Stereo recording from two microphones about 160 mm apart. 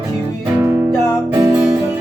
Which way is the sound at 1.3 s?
20° right (ahead or behind).